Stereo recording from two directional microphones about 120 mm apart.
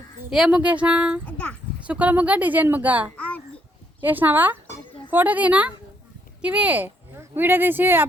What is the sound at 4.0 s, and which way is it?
Speech, 15° right (ahead or behind).